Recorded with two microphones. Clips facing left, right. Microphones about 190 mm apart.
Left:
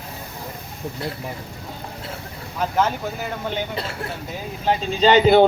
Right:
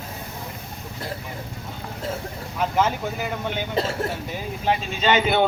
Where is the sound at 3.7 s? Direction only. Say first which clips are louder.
Right 5 dB; 40° right (ahead or behind).